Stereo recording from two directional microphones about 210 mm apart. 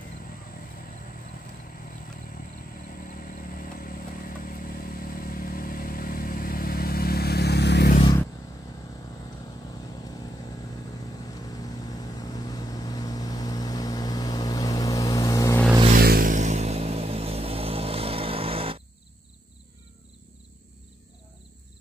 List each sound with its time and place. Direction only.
3.1 s vehicle: 40° left (ahead or behind)
12.2 s vehicle: 20° left (ahead or behind)
16.0 s vehicle: 45° right (ahead or behind); by 18.8 s 25° right (ahead or behind)